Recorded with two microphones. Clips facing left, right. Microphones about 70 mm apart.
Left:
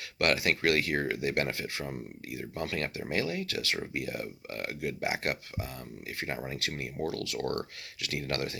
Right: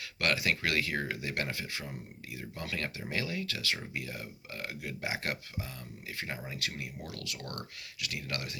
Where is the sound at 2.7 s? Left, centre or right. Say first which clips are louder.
Even; left.